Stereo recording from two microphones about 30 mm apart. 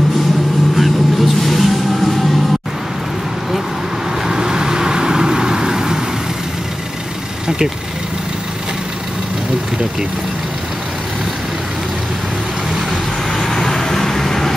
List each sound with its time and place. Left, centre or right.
0.7 s vehicle: centre
4.3 s vehicle: right
7.4 s vehicle: right
13.4 s vehicle: centre